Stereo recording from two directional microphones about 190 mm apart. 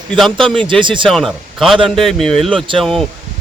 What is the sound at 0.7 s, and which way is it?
Speech, 25° right (ahead or behind).